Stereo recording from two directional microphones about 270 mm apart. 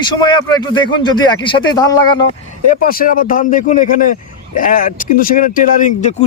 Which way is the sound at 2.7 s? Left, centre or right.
Left.